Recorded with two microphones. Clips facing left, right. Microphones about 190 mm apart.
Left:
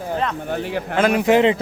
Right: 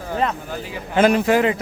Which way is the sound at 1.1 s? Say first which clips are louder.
Left 2 dB; 20° left (ahead or behind).